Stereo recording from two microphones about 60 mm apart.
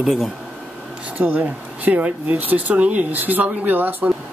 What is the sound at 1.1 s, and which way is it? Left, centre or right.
Speech, right.